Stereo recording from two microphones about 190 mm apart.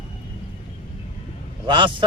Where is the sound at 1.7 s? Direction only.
25° right (ahead or behind).